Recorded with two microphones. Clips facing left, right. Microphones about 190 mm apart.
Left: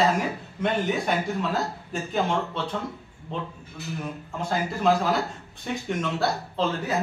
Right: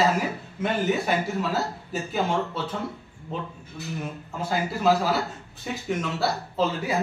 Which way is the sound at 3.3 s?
5° right (ahead or behind).